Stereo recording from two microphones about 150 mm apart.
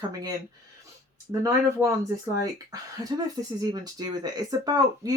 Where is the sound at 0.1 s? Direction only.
25° right (ahead or behind).